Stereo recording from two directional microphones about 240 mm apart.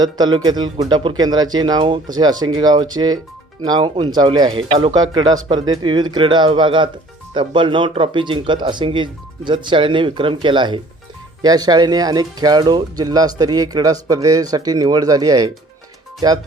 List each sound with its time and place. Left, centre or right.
0.0 s speech: centre